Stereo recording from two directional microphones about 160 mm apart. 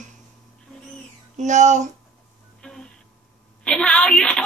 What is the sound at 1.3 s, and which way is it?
Speech, 50° right (ahead or behind).